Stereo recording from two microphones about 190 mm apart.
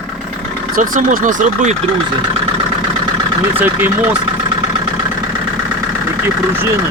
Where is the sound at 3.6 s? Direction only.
10° right (ahead or behind).